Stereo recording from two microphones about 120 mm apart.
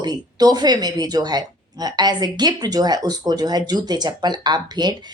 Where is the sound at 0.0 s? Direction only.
35° right (ahead or behind).